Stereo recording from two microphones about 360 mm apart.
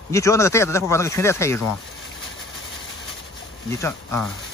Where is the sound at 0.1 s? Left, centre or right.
Centre.